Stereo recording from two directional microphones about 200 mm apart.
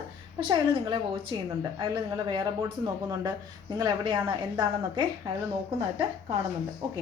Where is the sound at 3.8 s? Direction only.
25° right (ahead or behind).